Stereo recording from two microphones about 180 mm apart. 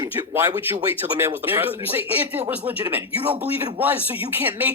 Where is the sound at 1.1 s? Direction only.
10° right (ahead or behind).